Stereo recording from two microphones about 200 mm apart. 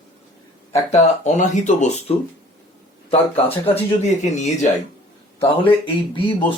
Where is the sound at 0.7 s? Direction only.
35° left (ahead or behind).